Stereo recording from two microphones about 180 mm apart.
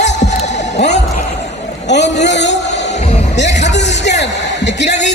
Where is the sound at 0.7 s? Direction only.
75° left (ahead or behind).